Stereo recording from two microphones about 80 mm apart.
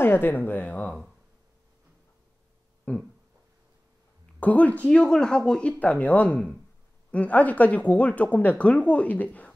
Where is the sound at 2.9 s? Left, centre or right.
Centre.